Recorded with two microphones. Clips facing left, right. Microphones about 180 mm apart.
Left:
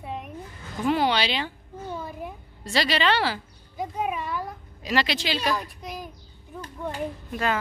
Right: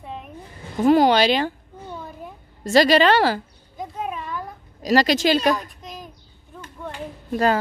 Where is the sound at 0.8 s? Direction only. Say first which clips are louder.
Right 8 dB; 40° right (ahead or behind).